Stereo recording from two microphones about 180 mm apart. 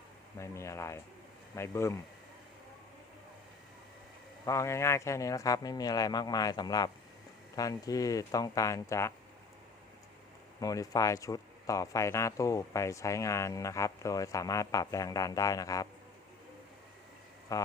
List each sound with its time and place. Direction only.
0.3 s speech: 15° left (ahead or behind)
4.4 s speech: 15° left (ahead or behind)
10.6 s speech: 20° left (ahead or behind)
17.5 s speech: 20° left (ahead or behind)